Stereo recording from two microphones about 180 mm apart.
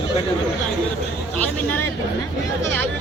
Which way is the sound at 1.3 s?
10° left (ahead or behind).